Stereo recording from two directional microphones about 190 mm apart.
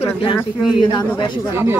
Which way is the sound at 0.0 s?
30° left (ahead or behind).